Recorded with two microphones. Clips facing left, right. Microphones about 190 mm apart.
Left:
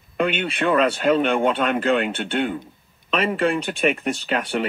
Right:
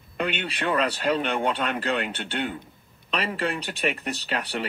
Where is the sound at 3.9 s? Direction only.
50° left (ahead or behind).